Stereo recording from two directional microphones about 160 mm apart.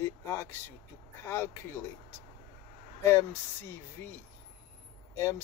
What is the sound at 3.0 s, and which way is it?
Speech, 15° left (ahead or behind).